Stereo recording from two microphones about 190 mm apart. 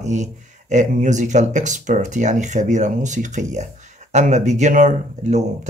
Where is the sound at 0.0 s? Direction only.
40° right (ahead or behind).